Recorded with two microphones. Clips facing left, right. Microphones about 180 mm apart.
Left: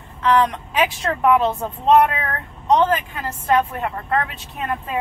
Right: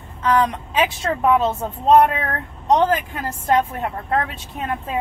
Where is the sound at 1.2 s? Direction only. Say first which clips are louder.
Left 1 dB; 25° right (ahead or behind).